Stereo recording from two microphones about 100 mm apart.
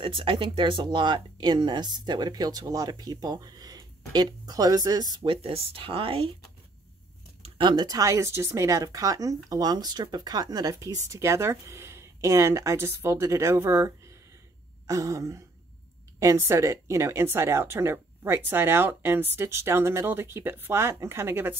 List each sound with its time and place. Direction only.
0.0 s speech: 60° right (ahead or behind); by 5.0 s 40° right (ahead or behind)
5.1 s speech: 60° right (ahead or behind)
7.4 s a woman's voice: 55° right (ahead or behind); by 21.5 s 25° right (ahead or behind)